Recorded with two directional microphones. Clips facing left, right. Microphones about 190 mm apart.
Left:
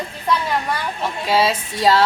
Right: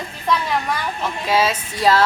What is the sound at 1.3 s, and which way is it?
Speech, 30° left (ahead or behind).